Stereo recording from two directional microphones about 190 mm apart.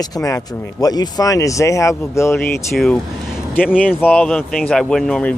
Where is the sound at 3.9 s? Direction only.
10° left (ahead or behind).